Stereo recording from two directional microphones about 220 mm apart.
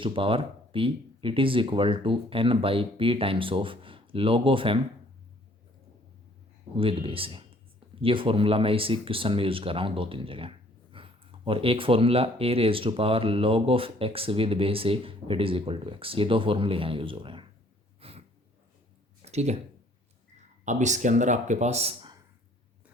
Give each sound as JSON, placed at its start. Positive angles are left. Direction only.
{"t": 0.0, "sound": "speech", "side_deg": -25}
{"t": 6.7, "sound": "speech", "side_deg": -25}
{"t": 18.0, "sound": "snort", "side_deg": -25}
{"t": 19.2, "sound": "a sound", "side_deg": -30}
{"t": 20.7, "sound": "speech", "side_deg": -35}